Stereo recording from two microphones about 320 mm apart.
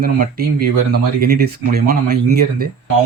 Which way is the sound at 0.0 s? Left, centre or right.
Right.